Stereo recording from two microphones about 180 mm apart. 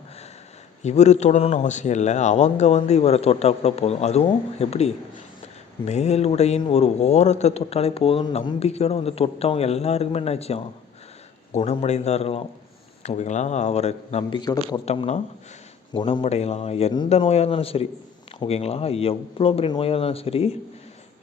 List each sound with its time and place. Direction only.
0.8 s a man's voice: 40° left (ahead or behind); by 14.6 s 25° left (ahead or behind)
14.8 s a man's voice: 35° left (ahead or behind)
15.9 s a man's voice: 25° left (ahead or behind)